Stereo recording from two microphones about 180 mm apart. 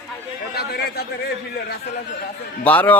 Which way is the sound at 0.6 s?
65° left (ahead or behind).